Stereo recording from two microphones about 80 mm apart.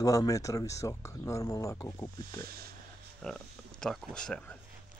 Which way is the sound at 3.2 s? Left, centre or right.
Centre.